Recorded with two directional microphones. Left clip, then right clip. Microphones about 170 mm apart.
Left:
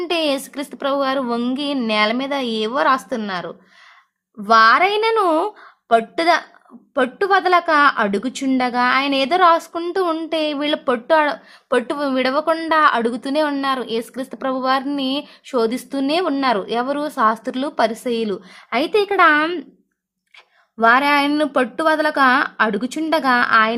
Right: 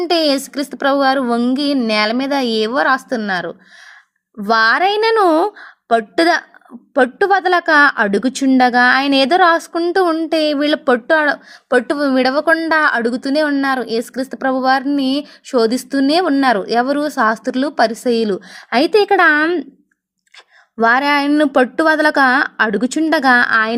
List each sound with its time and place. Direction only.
0.0 s a woman's voice: 25° right (ahead or behind)
20.7 s a woman's voice: 30° right (ahead or behind)